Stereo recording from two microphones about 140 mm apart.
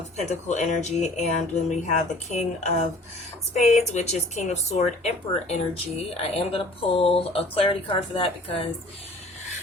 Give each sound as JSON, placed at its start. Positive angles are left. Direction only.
{"t": 0.2, "sound": "speech", "side_deg": 55}
{"t": 3.9, "sound": "speech", "side_deg": 55}